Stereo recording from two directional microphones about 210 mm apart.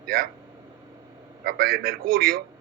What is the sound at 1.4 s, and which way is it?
Speech, 45° right (ahead or behind).